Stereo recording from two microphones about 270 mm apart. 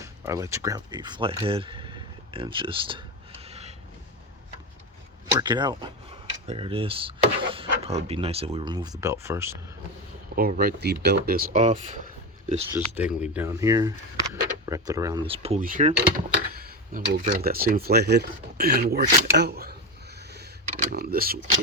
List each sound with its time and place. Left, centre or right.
0.0 s speech: centre
5.3 s speech: centre
10.3 s speech: right
12.7 s speech: centre; by 21.3 s right